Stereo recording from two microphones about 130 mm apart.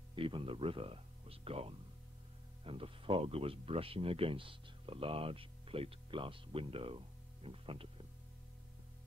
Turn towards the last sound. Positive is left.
turn(degrees=-45)  # may be behind; listen again after turning